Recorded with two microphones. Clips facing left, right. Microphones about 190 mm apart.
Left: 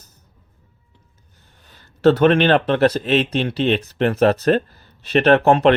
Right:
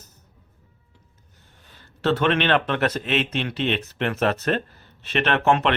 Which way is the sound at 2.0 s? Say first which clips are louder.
Left 8 dB; 40° left (ahead or behind).